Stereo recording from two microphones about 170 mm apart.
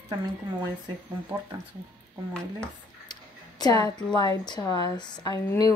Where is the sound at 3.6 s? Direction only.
20° left (ahead or behind).